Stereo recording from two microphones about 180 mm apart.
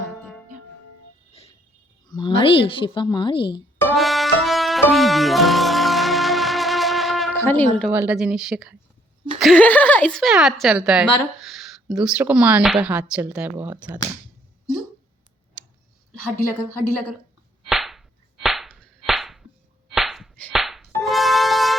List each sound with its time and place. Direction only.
2.0 s a woman's voice: 25° left (ahead or behind)
3.8 s music: centre (ahead or behind)
7.3 s speech: 10° left (ahead or behind)
7.9 s a woman's voice: 10° right (ahead or behind)
17.7 s whip: centre (ahead or behind)
19.9 s a sound: centre (ahead or behind)
20.5 s music: centre (ahead or behind)